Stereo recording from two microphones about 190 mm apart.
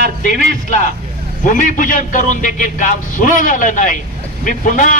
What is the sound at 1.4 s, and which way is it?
Speech, 45° left (ahead or behind).